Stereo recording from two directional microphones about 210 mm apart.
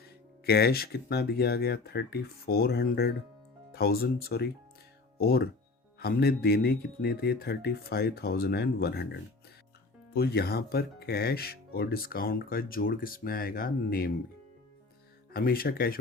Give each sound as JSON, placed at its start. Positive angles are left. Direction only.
{"t": 0.4, "sound": "speech", "side_deg": 50}
{"t": 10.2, "sound": "speech", "side_deg": 50}
{"t": 15.3, "sound": "speech", "side_deg": 45}